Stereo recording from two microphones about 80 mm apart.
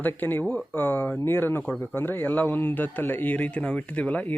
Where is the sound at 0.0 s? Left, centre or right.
Left.